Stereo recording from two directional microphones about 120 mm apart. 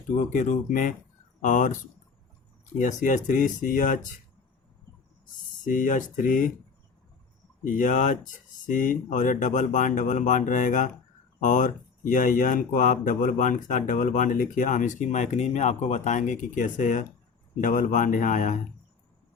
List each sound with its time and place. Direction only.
0.2 s speech: 90° left
2.7 s speech: 90° left
5.6 s speech: 90° left
7.7 s speech: 90° left